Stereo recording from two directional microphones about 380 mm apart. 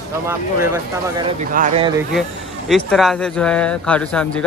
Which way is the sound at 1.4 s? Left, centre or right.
Centre.